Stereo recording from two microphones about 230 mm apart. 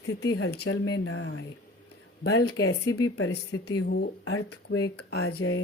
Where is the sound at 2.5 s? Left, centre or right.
Left.